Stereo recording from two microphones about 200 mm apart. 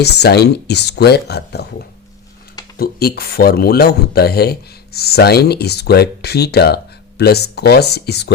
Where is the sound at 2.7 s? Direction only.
50° left (ahead or behind).